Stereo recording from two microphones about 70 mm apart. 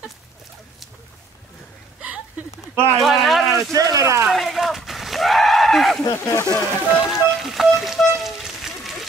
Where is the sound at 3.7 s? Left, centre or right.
Right.